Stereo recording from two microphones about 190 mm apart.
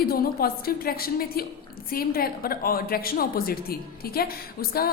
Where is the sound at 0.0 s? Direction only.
50° left (ahead or behind).